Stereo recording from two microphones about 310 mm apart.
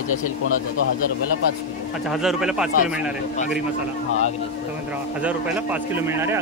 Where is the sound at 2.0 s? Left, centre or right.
Centre.